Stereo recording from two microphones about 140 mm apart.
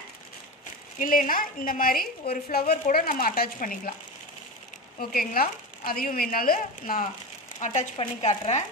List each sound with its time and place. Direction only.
0.9 s a woman's voice: 70° left (ahead or behind)
4.9 s a woman's voice: 90° left
7.6 s speech: 60° left (ahead or behind)